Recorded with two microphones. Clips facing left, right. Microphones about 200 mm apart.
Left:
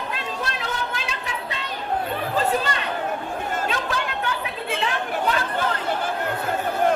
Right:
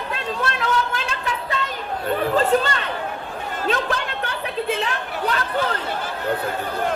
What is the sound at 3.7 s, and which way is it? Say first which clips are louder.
Chatter: right 4 dB; 50° right (ahead or behind).